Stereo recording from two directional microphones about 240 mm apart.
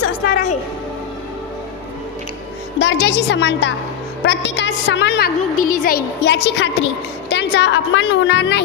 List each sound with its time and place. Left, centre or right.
0.3 s music: left
2.8 s a woman's voice: left